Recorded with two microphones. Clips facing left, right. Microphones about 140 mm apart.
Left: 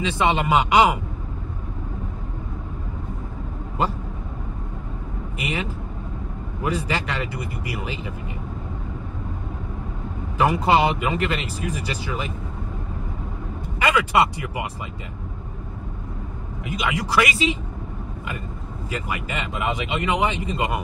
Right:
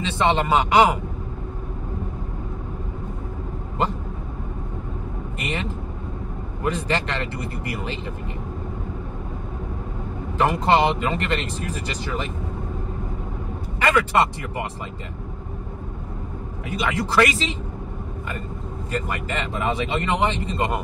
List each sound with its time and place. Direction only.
0.0 s speech: 10° left (ahead or behind)
5.4 s speech: 10° left (ahead or behind)
10.3 s speech: 10° left (ahead or behind)
13.7 s speech: 10° left (ahead or behind)
16.6 s speech: 15° left (ahead or behind)
18.9 s speech: 5° left (ahead or behind)